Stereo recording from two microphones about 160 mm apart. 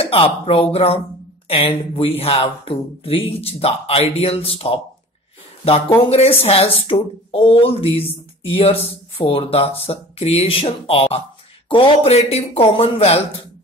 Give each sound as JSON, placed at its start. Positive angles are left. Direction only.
{"t": 0.0, "sound": "speech", "side_deg": 35}
{"t": 6.0, "sound": "speech", "side_deg": 40}